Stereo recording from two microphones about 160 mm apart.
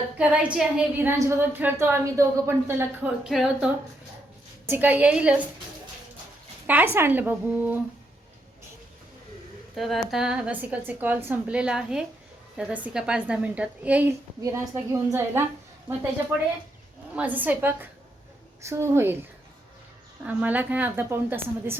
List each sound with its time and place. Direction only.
0.2 s a woman's voice: 5° right (ahead or behind)
3.2 s a woman's voice: 5° right (ahead or behind)
6.7 s a woman's voice: 10° right (ahead or behind)
9.7 s a woman's voice: centre (ahead or behind); by 15.4 s 15° right (ahead or behind)
17.2 s a woman's voice: 10° right (ahead or behind)
20.2 s a woman's voice: 10° right (ahead or behind)